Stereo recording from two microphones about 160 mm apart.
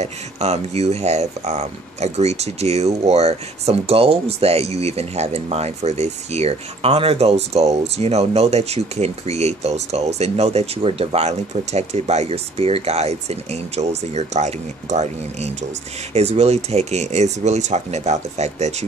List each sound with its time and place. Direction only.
0.0 s speech: 45° right (ahead or behind)